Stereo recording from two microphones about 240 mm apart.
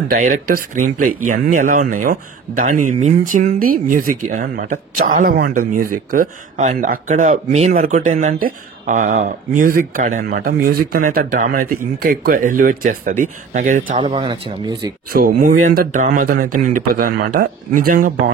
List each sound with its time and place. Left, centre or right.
0.1 s speech: right
13.9 s speech: right
15.1 s speech: right
16.4 s a man's voice: right
16.7 s speech: right